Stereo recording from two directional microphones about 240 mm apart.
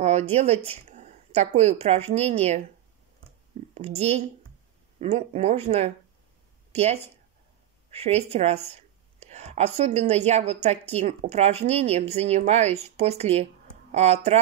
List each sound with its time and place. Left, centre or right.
0.0 s a woman's voice: right
3.7 s a woman's voice: right